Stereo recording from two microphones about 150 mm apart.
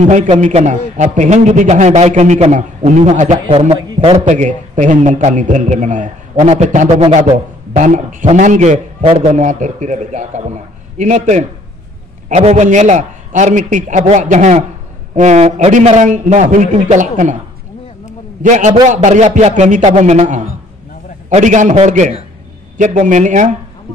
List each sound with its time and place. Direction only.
0.0 s a man's voice: 50° right (ahead or behind)
4.2 s a man's voice: 55° right (ahead or behind)
9.0 s a man's voice: 40° right (ahead or behind)
9.3 s a man's voice: 55° right (ahead or behind)
18.4 s a man's voice: 55° right (ahead or behind)